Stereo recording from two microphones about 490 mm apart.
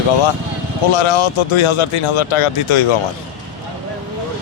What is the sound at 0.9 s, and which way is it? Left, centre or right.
Speech, left.